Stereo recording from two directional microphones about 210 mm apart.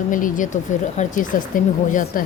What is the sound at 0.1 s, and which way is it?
Speech, 40° left (ahead or behind).